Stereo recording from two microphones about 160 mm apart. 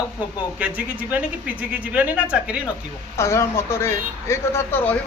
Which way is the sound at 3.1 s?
15° left (ahead or behind).